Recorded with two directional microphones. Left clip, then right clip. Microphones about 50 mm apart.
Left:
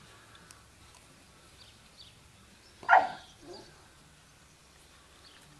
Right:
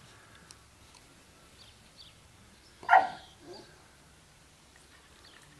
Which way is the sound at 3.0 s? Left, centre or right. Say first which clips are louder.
Right 3 dB; right.